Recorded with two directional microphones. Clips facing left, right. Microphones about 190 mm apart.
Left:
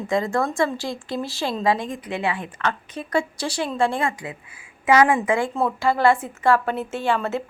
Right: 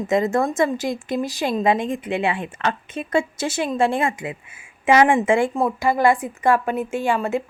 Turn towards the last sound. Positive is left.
turn(degrees=-15)  # may be behind; listen again after turning